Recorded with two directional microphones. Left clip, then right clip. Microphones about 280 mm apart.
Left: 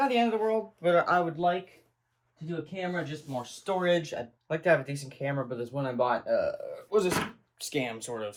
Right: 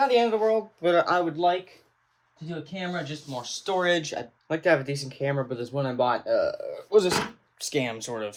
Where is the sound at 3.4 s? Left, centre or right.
Centre.